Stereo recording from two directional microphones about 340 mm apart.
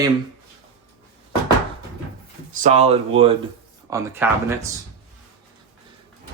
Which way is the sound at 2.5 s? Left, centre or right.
Right.